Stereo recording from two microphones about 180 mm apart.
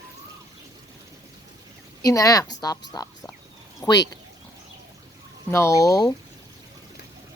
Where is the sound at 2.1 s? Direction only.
20° left (ahead or behind).